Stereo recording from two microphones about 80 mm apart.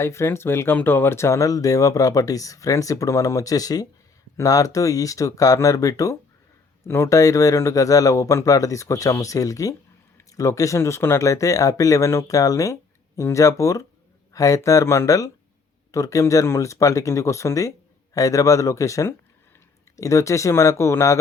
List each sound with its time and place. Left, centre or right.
0.0 s speech: left
6.8 s speech: left